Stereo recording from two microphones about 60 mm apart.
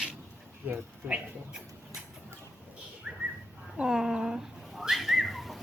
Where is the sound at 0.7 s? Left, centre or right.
Right.